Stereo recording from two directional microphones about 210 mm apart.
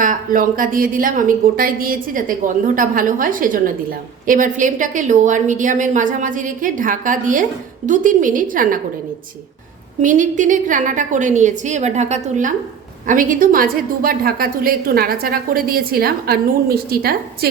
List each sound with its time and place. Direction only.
0.0 s a woman's voice: 40° right (ahead or behind)
10.0 s a woman's voice: 40° right (ahead or behind)